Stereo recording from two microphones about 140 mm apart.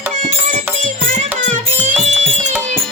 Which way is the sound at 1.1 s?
60° right (ahead or behind).